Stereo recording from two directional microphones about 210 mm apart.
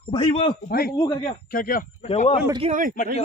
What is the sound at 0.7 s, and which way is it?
Speech, 45° left (ahead or behind).